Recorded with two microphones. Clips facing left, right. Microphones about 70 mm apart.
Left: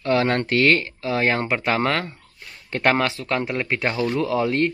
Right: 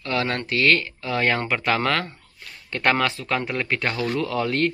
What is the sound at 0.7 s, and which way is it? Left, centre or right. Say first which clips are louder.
Speech: left 2 dB; centre.